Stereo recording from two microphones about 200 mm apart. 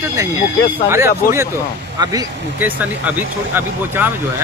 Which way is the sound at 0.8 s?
15° right (ahead or behind).